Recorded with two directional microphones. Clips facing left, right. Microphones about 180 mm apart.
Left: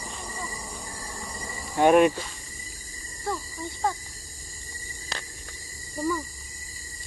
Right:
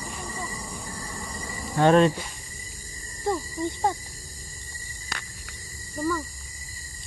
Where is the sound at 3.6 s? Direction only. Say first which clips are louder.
Right 8 dB; 20° right (ahead or behind).